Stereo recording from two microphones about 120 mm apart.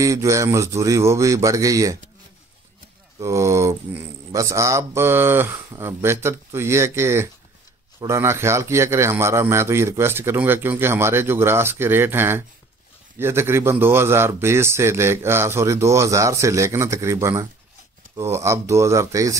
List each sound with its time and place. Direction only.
0.0 s a man's voice: 25° right (ahead or behind)
3.2 s a man's voice: 25° right (ahead or behind)